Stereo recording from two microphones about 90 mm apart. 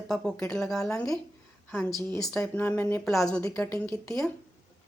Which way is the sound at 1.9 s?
35° left (ahead or behind).